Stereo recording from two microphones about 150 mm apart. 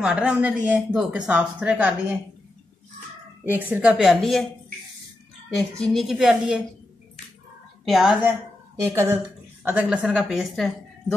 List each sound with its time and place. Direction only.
0.0 s speech: 5° right (ahead or behind)
3.7 s a woman's voice: 5° right (ahead or behind)
5.5 s a woman's voice: 5° left (ahead or behind)
7.8 s a woman's voice: centre (ahead or behind)
8.8 s a woman's voice: 15° right (ahead or behind); by 11.1 s centre (ahead or behind)